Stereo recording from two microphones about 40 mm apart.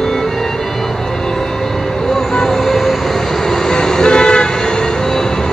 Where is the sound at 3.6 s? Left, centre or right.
Centre.